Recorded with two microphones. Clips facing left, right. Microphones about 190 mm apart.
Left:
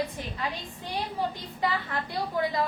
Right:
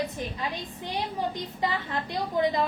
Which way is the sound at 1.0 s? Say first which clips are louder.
Right 1 dB; 20° right (ahead or behind).